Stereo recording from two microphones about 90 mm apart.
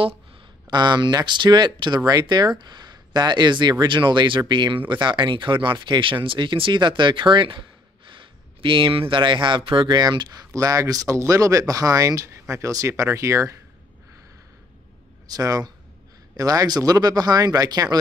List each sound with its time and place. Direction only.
0.7 s speech: 55° right (ahead or behind)
8.0 s a sound: 70° right (ahead or behind)
9.1 s speech: 65° right (ahead or behind)
9.9 s speech: 50° right (ahead or behind)
12.3 s speech: 30° right (ahead or behind)
15.2 s speech: 45° right (ahead or behind)